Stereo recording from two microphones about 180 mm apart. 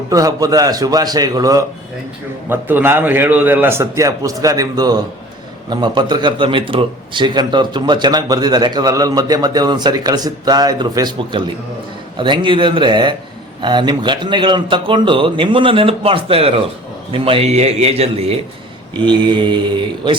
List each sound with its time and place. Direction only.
0.1 s a man's voice: 20° right (ahead or behind)